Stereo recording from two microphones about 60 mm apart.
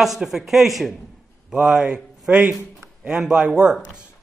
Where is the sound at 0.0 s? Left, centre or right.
Centre.